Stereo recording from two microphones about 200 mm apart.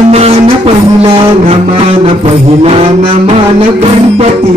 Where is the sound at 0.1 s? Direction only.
30° right (ahead or behind).